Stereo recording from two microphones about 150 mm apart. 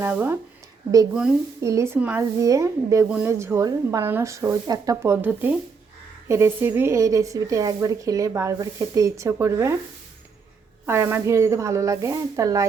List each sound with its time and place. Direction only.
0.0 s a woman's voice: 15° right (ahead or behind)
1.6 s a woman's voice: 20° right (ahead or behind)
2.4 s a woman's voice: 20° right (ahead or behind)
10.8 s speech: 15° right (ahead or behind)